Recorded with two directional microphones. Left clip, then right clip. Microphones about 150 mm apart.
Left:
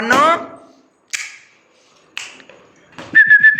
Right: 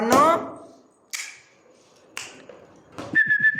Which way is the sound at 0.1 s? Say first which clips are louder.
Left 5 dB; 10° right (ahead or behind).